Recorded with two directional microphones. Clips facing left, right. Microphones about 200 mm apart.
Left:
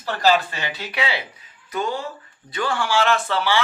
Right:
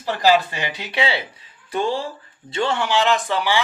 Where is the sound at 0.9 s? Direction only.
30° right (ahead or behind).